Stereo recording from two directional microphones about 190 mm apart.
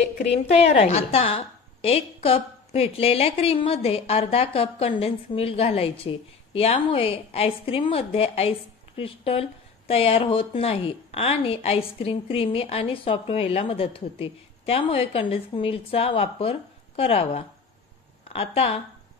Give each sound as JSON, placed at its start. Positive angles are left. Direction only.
{"t": 0.6, "sound": "a woman's voice", "side_deg": 35}